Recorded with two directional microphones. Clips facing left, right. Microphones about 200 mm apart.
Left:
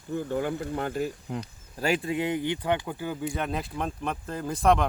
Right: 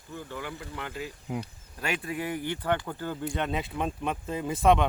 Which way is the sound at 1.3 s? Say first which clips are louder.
Even; 10° right (ahead or behind).